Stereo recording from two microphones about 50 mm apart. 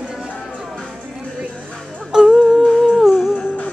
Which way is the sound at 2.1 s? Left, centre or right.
Centre.